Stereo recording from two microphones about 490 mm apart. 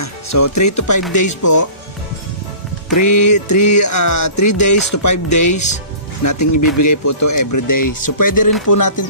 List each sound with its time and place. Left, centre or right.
0.0 s music: left
2.9 s music: left